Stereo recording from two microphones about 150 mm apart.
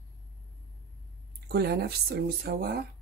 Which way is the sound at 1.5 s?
90° right.